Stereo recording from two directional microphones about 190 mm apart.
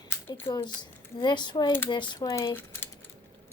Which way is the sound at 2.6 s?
10° left (ahead or behind).